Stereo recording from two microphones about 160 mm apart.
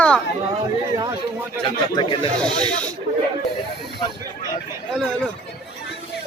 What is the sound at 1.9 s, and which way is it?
Speech, 35° left (ahead or behind).